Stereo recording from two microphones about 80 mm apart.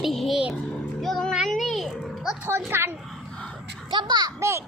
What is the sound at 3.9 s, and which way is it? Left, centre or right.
Speech, right.